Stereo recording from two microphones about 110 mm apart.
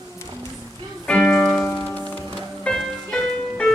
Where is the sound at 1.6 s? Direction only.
15° left (ahead or behind).